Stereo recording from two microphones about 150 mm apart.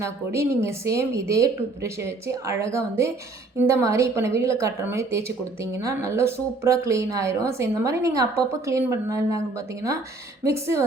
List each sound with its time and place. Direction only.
0.0 s a woman's voice: 20° right (ahead or behind)
10.4 s a woman's voice: 20° right (ahead or behind)